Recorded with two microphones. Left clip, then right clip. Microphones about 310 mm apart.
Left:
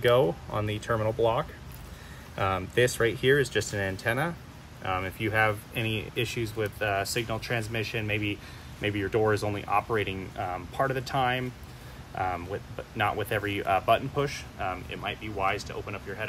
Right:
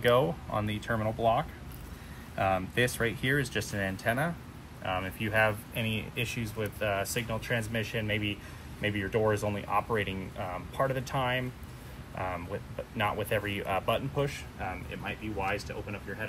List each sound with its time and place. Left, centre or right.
0.0 s speech: left
12.9 s speech: left; by 15.6 s centre